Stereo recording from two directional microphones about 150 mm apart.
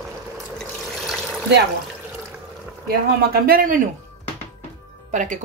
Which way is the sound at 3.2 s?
85° right.